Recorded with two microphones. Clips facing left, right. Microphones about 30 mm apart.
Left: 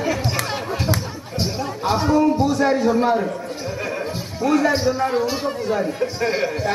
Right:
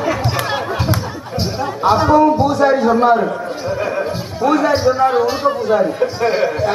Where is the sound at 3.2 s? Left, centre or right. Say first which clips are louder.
Right 5 dB; right.